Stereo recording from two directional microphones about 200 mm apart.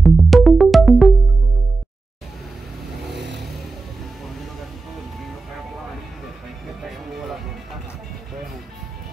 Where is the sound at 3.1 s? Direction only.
60° right (ahead or behind).